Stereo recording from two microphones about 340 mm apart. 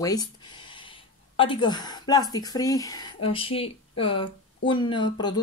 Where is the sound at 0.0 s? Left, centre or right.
Centre.